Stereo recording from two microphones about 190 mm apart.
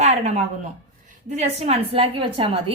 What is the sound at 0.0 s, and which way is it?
A woman's voice, 35° right (ahead or behind).